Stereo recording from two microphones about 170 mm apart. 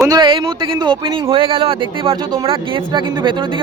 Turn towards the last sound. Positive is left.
turn(degrees=-30)  # may be behind; listen again after turning